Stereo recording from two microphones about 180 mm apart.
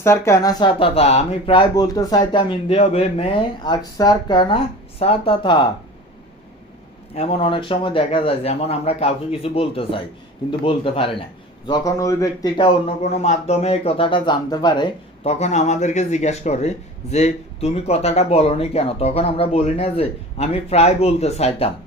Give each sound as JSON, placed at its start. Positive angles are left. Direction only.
{"t": 0.0, "sound": "speech", "side_deg": 15}
{"t": 7.1, "sound": "a man's voice", "side_deg": 30}
{"t": 15.2, "sound": "a man's voice", "side_deg": 35}